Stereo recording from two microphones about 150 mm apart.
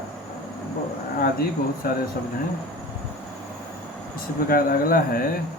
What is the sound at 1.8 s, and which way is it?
Speech, 75° left (ahead or behind).